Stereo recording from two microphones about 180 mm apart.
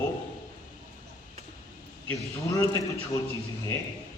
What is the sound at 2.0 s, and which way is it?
Speech, 15° left (ahead or behind).